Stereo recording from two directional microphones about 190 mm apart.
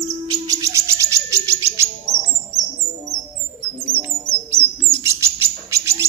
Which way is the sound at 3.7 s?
10° right (ahead or behind).